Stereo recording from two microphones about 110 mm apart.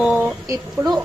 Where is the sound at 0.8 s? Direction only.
25° right (ahead or behind).